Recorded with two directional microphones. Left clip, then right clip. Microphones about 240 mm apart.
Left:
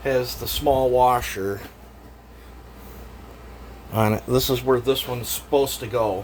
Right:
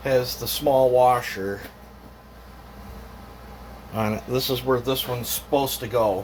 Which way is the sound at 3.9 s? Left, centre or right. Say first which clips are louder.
Left 4 dB; left.